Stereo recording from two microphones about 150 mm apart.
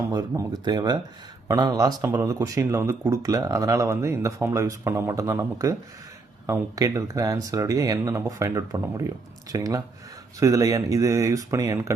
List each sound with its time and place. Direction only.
0.1 s speech: 25° right (ahead or behind)